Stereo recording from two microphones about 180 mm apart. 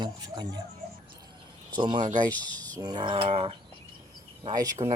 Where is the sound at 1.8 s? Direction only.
25° right (ahead or behind).